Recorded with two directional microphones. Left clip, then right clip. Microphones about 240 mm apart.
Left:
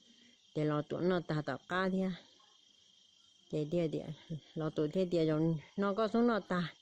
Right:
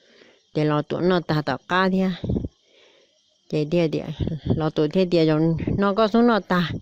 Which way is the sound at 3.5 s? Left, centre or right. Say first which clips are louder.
Right 13 dB; right.